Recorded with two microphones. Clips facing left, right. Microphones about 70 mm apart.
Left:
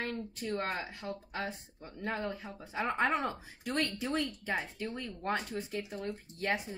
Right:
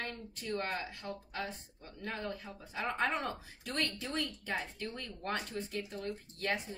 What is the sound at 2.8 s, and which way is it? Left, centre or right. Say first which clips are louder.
Speech: left 3 dB; centre.